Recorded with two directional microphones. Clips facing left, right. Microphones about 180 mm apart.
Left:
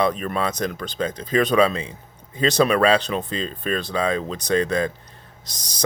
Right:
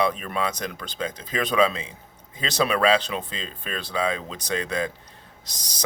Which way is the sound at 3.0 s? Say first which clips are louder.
Left 6 dB; 45° left (ahead or behind).